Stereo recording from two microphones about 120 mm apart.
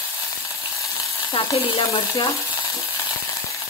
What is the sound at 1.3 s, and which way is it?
Speech, 40° left (ahead or behind).